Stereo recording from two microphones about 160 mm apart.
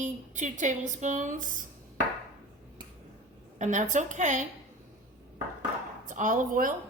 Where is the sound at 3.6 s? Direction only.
50° right (ahead or behind).